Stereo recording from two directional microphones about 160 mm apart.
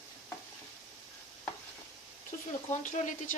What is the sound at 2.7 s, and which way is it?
Speech, 50° left (ahead or behind).